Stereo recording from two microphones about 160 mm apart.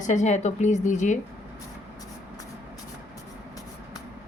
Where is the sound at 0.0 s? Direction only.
50° left (ahead or behind).